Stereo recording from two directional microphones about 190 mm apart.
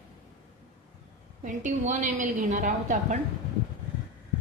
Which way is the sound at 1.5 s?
40° right (ahead or behind).